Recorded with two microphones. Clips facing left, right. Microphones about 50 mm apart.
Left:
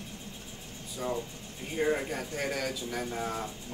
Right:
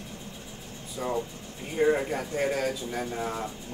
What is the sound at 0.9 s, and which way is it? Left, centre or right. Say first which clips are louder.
Vehicle: right 3 dB; right.